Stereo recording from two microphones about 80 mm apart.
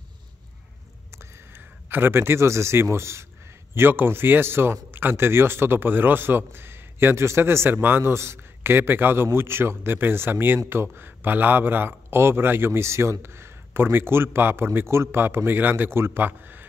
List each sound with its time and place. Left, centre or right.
1.1 s a man's voice: right